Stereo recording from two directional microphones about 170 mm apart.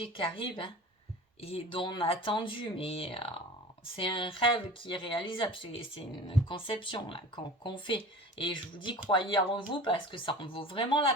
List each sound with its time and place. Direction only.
0.0 s speech: 30° left (ahead or behind)